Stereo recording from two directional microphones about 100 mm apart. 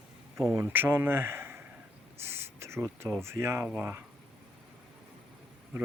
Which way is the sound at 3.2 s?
25° right (ahead or behind).